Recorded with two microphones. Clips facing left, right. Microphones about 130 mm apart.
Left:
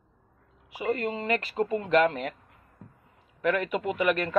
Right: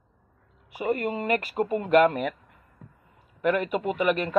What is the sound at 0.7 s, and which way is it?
Speech, 45° right (ahead or behind).